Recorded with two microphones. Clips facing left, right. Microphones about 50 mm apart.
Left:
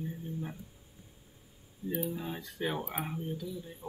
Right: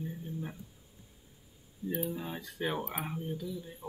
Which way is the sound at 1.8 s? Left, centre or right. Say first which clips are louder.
Even; left.